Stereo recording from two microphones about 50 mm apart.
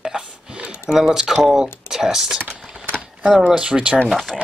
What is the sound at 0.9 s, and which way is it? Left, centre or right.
Speech, centre.